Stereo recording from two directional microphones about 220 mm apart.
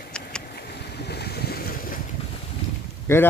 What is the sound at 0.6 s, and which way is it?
Boat, 45° left (ahead or behind).